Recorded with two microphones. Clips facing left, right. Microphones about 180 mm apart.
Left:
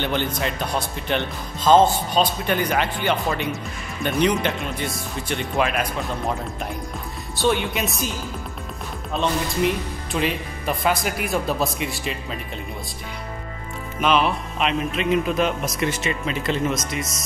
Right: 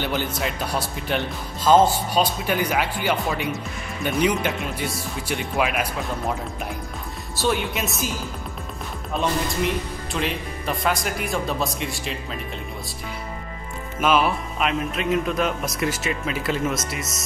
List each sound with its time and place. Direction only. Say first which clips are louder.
0.0 s speech: left 1 dB; 5° right (ahead or behind)
7.3 s a man's voice: left 2 dB; centre (ahead or behind)
9.2 s a man's voice: left 2 dB; centre (ahead or behind)
14.0 s a man's voice: even; 5° right (ahead or behind)